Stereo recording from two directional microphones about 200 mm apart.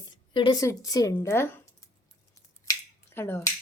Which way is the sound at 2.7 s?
20° left (ahead or behind).